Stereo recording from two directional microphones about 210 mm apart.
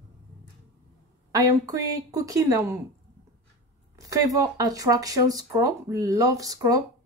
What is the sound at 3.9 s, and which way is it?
Speech, 15° right (ahead or behind).